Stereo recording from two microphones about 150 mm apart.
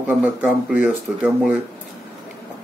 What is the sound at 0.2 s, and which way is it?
Speech, 10° right (ahead or behind).